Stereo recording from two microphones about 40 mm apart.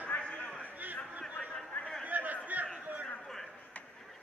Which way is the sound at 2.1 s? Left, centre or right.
Right.